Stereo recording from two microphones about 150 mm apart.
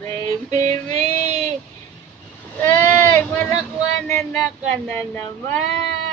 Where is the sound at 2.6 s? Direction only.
15° left (ahead or behind).